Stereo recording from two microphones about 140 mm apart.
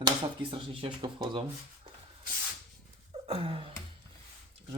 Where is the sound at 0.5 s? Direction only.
40° right (ahead or behind).